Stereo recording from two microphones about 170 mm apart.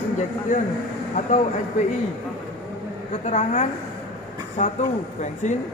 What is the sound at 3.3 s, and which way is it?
A woman's voice, 40° left (ahead or behind).